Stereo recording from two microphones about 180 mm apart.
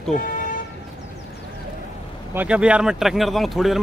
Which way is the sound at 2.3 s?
5° right (ahead or behind).